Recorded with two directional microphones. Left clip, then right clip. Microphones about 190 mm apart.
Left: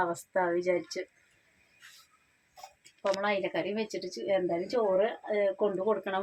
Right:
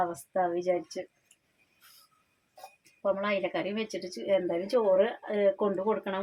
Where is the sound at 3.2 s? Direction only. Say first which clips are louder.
Even; 5° right (ahead or behind).